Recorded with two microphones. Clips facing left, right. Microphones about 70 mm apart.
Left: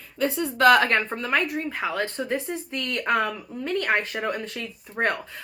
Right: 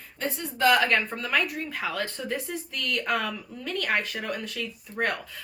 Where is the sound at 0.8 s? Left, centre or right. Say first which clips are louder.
Left 2 dB; left.